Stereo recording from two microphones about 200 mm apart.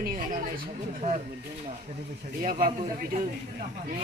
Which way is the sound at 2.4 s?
40° right (ahead or behind).